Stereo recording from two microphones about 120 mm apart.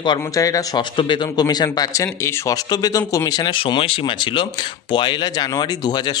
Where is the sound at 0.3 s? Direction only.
30° left (ahead or behind).